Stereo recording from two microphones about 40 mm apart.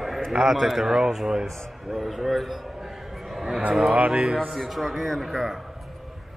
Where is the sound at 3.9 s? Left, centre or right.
Right.